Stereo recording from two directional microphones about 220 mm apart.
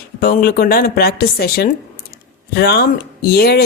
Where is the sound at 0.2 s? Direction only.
40° left (ahead or behind).